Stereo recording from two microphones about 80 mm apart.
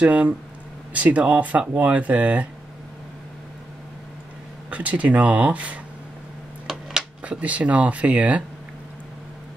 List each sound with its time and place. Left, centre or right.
0.0 s speech: centre
4.6 s speech: centre